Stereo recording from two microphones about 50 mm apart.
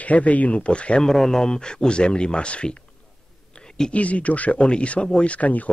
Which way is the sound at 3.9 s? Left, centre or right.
Left.